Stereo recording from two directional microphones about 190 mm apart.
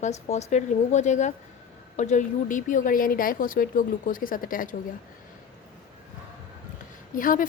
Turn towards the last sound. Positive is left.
turn(degrees=45)  # may be behind; listen again after turning